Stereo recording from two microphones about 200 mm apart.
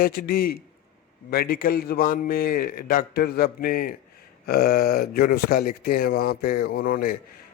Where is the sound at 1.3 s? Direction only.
50° left (ahead or behind).